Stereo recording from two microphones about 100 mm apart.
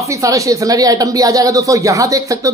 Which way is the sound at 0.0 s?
30° right (ahead or behind).